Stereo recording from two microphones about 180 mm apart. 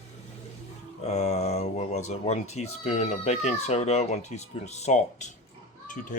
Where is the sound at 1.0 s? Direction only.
35° left (ahead or behind).